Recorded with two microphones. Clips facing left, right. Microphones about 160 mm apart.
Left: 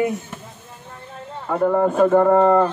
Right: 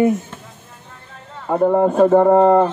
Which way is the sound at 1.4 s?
20° right (ahead or behind).